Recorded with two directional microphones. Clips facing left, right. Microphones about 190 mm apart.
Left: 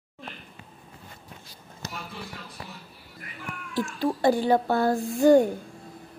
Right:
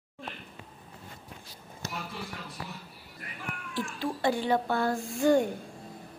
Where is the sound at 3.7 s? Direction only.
40° left (ahead or behind).